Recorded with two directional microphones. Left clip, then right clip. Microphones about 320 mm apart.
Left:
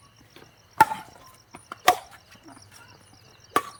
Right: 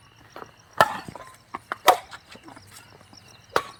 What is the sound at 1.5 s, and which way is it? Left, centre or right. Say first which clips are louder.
Chicken: right 3 dB; centre.